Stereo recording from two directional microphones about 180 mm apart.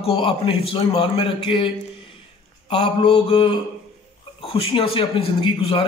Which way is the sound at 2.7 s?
35° left (ahead or behind).